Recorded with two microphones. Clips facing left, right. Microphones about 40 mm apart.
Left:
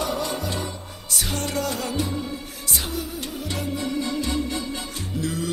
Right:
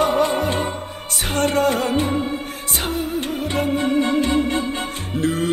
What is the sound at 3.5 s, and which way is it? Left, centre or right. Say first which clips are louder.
Music: right 8 dB; right.